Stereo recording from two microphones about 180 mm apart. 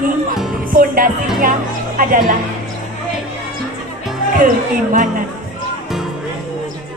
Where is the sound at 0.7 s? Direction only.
50° right (ahead or behind).